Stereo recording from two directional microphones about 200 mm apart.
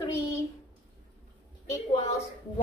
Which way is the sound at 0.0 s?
15° left (ahead or behind).